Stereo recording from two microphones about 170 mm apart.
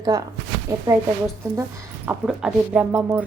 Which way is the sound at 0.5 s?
90° right.